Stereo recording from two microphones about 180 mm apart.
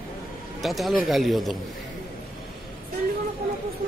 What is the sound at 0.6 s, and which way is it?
A man's voice, centre (ahead or behind).